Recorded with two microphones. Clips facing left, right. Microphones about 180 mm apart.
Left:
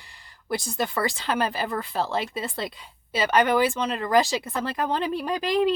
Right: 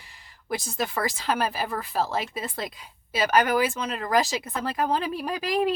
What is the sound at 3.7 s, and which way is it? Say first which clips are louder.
Speech: left 3 dB; 5° right (ahead or behind).